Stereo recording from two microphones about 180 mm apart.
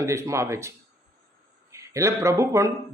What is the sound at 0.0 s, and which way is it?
Speech, 15° right (ahead or behind).